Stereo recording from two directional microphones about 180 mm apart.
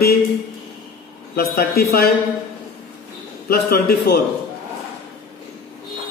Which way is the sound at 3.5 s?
60° left (ahead or behind).